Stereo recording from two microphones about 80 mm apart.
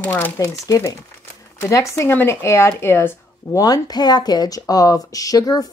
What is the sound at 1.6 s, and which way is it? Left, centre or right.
Speech, left.